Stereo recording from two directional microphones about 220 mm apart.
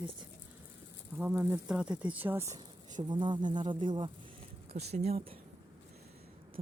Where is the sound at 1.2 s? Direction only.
10° right (ahead or behind); by 5.3 s 30° right (ahead or behind).